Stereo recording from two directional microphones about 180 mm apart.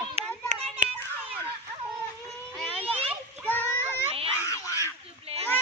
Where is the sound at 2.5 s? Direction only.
5° left (ahead or behind).